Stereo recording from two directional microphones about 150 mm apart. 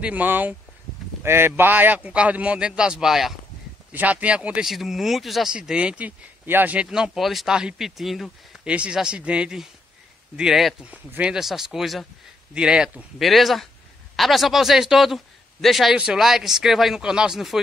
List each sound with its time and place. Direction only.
0.0 s speech: 10° right (ahead or behind)